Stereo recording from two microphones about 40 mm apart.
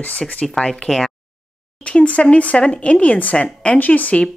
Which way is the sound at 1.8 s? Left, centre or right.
Left.